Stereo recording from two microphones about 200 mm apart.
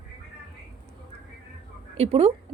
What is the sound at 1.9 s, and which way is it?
Speech, 30° right (ahead or behind).